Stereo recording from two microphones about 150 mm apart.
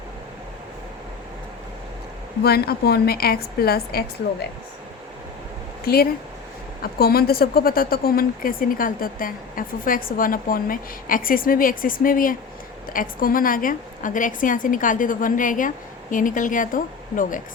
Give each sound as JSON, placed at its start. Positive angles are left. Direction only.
{"t": 2.4, "sound": "a woman's voice", "side_deg": 90}
{"t": 5.8, "sound": "a woman's voice", "side_deg": 90}